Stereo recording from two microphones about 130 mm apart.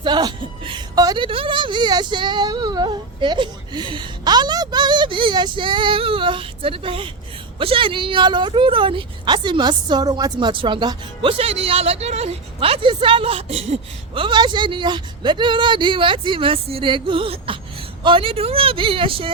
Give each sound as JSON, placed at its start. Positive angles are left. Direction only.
{"t": 0.0, "sound": "a woman's voice", "side_deg": -35}